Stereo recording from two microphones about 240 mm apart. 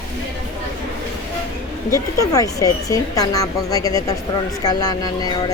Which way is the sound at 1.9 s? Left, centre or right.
Centre.